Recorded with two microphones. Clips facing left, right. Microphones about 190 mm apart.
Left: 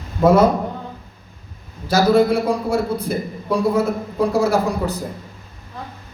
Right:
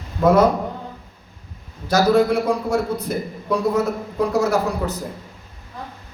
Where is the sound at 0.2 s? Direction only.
25° left (ahead or behind).